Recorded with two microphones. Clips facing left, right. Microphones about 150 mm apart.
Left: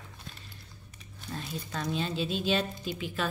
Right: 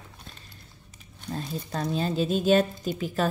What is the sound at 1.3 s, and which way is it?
Speech, 35° right (ahead or behind).